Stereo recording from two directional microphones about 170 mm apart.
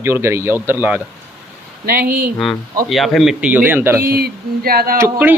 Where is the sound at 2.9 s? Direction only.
Centre (ahead or behind).